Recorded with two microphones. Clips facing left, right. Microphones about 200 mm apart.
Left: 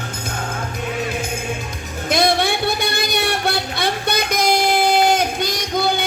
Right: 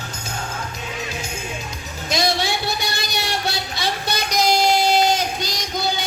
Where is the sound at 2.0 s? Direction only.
55° left (ahead or behind).